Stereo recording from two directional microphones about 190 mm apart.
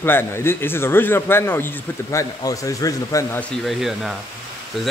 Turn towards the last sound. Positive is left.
turn(degrees=0)  # may be behind; listen again after turning